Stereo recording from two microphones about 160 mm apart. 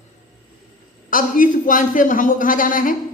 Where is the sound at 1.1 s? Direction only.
55° left (ahead or behind).